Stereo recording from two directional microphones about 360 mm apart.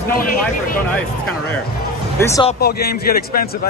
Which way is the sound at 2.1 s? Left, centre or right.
Centre.